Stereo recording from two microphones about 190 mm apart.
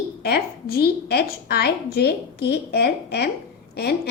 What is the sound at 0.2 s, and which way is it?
A woman's voice, 55° left (ahead or behind).